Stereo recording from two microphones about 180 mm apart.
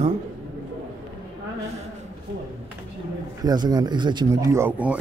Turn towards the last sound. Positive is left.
turn(degrees=-10)  # may be behind; listen again after turning